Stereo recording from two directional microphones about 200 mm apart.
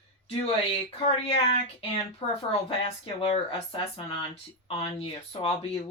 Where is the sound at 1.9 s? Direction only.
30° left (ahead or behind).